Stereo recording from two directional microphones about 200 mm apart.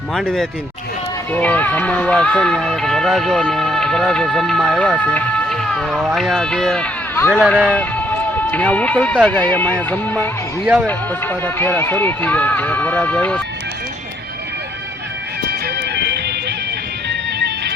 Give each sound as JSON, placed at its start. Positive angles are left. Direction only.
{"t": 0.1, "sound": "speech", "side_deg": 0}
{"t": 15.6, "sound": "music", "side_deg": -55}
{"t": 17.4, "sound": "music", "side_deg": -55}